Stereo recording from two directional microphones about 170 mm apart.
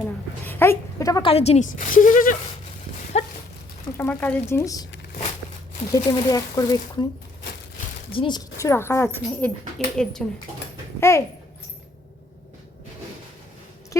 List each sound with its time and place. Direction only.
0.4 s a sound: 15° left (ahead or behind)
1.3 s a woman's voice: 35° left (ahead or behind)
3.1 s a sound: 40° left (ahead or behind)
3.9 s speech: 10° left (ahead or behind)
6.0 s speech: 25° left (ahead or behind)
8.1 s a woman's voice: 30° left (ahead or behind)
8.5 s speech: 15° left (ahead or behind)
9.7 s a woman's voice: 5° left (ahead or behind)
11.1 s speech: 15° left (ahead or behind)
13.9 s a sound: 20° left (ahead or behind)